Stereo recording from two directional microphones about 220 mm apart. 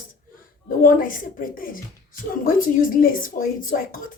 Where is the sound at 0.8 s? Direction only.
40° left (ahead or behind).